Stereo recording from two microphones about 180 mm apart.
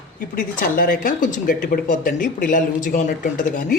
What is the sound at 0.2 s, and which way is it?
Speech, 50° left (ahead or behind).